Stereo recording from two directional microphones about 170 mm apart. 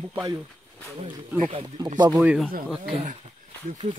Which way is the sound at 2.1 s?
Centre (ahead or behind).